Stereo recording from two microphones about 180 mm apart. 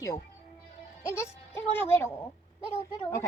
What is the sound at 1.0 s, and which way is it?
A woman's voice, 15° left (ahead or behind).